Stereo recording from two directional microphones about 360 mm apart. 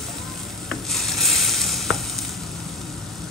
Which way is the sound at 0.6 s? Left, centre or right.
Centre.